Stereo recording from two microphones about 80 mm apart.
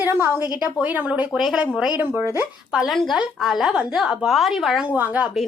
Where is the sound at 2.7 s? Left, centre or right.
Centre.